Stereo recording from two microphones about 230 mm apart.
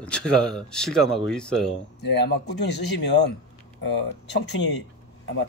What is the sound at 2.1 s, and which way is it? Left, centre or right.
Speech, left.